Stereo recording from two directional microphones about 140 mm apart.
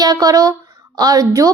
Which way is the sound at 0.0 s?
25° right (ahead or behind).